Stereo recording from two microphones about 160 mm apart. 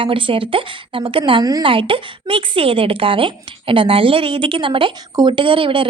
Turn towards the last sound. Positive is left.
turn(degrees=-35)  # may be behind; listen again after turning